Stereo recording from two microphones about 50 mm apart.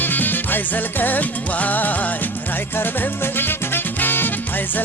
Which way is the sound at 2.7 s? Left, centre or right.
Left.